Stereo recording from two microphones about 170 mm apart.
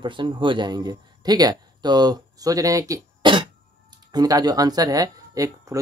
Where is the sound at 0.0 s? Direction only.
30° right (ahead or behind).